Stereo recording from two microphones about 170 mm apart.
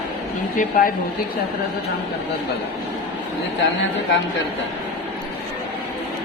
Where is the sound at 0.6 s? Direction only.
55° left (ahead or behind).